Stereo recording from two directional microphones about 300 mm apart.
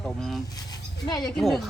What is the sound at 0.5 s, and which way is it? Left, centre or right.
Speech, centre.